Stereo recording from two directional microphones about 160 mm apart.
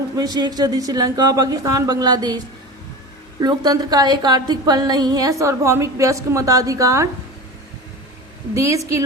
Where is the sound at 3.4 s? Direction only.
25° right (ahead or behind).